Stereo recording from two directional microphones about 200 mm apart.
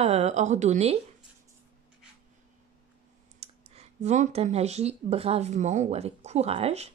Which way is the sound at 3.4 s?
30° right (ahead or behind).